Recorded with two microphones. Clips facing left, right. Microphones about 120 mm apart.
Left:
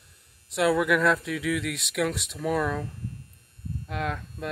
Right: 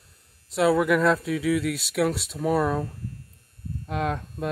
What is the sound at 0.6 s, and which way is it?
Speech, 30° right (ahead or behind).